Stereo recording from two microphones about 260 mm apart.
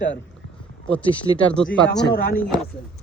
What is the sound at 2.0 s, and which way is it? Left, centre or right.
Speech, left.